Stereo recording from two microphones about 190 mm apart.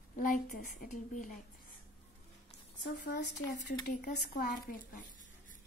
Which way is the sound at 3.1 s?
60° left (ahead or behind).